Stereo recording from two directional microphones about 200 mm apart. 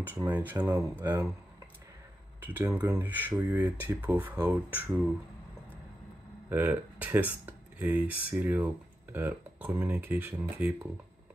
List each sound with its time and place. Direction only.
0.0 s speech: 10° right (ahead or behind)
2.4 s speech: 10° right (ahead or behind)
4.8 s speech: centre (ahead or behind)
6.5 s speech: 10° right (ahead or behind)